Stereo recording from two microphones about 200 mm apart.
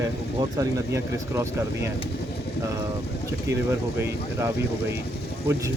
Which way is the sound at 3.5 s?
15° right (ahead or behind).